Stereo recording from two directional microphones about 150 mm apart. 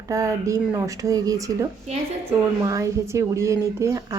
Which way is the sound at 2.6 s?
20° right (ahead or behind).